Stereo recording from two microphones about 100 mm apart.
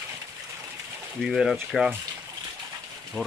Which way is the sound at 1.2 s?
5° right (ahead or behind).